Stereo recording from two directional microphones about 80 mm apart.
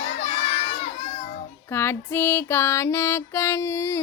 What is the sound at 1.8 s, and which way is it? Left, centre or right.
Music, left.